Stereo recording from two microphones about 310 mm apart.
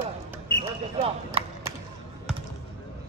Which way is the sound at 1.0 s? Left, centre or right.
Centre.